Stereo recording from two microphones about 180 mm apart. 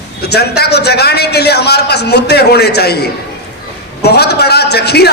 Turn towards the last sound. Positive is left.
turn(degrees=65)  # may be behind; listen again after turning